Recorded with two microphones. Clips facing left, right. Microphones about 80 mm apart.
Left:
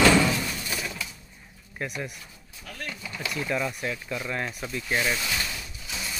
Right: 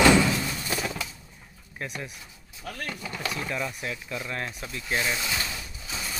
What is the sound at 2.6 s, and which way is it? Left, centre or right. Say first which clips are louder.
Speech: right 3 dB; right.